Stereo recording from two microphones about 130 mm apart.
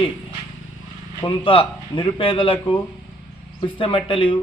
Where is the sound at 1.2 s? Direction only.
40° left (ahead or behind).